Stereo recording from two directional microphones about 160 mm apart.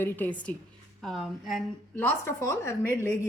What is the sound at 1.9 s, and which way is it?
A woman's voice, 15° left (ahead or behind).